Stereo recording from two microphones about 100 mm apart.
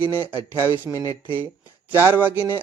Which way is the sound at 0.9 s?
35° left (ahead or behind).